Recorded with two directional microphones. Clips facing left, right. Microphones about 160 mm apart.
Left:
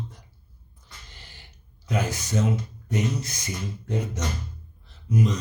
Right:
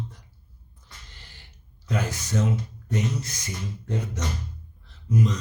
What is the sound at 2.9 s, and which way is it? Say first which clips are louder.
Speech: left 1 dB; 10° left (ahead or behind).